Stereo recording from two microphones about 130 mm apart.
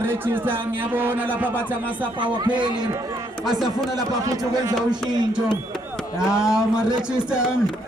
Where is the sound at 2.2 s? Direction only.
35° right (ahead or behind).